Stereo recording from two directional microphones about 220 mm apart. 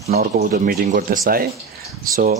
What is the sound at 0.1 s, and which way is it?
A man's voice, 40° right (ahead or behind).